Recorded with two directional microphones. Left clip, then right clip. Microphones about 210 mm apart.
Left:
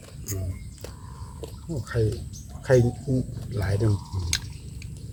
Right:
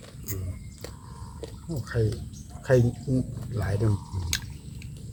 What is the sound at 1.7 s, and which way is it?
Speech, 15° left (ahead or behind).